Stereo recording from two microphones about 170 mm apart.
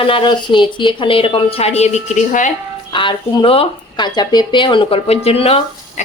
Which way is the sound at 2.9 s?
30° left (ahead or behind).